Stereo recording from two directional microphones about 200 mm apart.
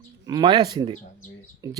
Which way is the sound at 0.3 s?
20° right (ahead or behind).